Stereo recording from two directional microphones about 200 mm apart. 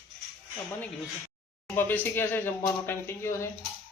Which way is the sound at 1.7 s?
10° left (ahead or behind).